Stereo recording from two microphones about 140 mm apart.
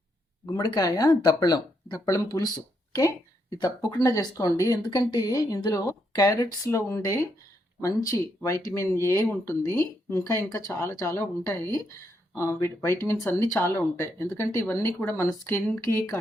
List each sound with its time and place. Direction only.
0.4 s speech: 25° left (ahead or behind)
3.6 s speech: 30° left (ahead or behind); by 15.8 s 10° left (ahead or behind)